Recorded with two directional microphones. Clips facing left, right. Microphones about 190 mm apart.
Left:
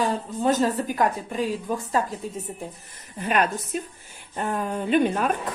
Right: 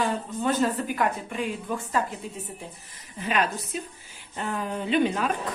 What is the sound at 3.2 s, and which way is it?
Speech, 50° left (ahead or behind).